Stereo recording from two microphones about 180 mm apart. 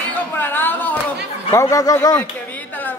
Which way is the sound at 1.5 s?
15° left (ahead or behind).